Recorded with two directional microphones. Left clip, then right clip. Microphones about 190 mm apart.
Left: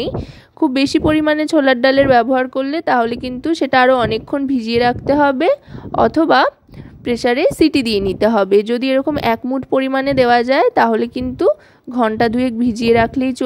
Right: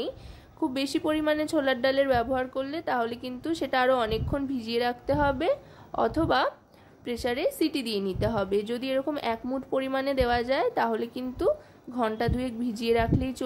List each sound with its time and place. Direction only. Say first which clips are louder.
0.6 s a woman's voice: left 14 dB; 40° left (ahead or behind)